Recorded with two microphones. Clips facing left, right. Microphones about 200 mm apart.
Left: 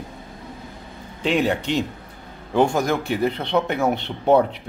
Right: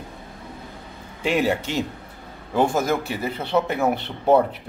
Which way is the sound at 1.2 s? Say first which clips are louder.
Left 1 dB; 5° right (ahead or behind).